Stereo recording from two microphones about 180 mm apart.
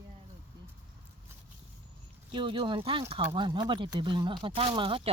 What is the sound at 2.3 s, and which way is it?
Speech, 30° right (ahead or behind).